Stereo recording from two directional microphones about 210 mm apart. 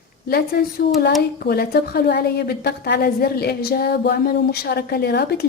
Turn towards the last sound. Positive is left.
turn(degrees=50)  # may be behind; listen again after turning